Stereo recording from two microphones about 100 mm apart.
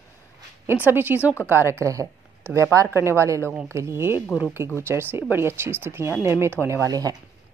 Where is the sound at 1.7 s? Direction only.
30° right (ahead or behind).